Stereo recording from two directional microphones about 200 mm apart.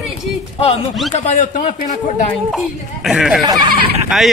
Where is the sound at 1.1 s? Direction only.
40° left (ahead or behind).